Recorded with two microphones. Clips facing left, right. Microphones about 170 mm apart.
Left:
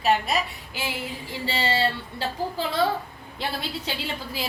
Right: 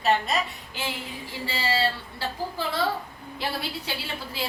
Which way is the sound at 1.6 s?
25° left (ahead or behind).